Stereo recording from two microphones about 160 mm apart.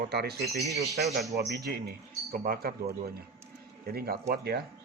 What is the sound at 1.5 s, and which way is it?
Speech, 80° right.